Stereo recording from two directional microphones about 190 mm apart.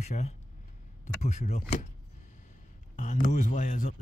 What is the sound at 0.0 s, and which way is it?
Speech, 35° left (ahead or behind).